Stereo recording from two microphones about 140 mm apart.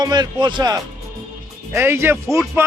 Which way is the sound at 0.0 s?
30° right (ahead or behind).